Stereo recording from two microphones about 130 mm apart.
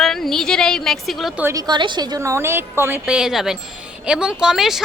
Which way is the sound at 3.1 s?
5° right (ahead or behind).